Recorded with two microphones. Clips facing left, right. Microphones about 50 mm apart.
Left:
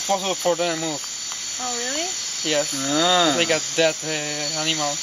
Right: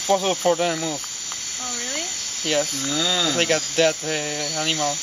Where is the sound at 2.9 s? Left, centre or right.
Left.